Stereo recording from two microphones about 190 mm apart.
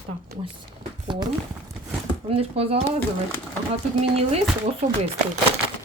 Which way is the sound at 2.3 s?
30° right (ahead or behind).